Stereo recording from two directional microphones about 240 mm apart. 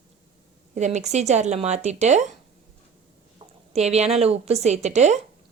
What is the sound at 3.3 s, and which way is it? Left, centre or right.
A woman's voice, right.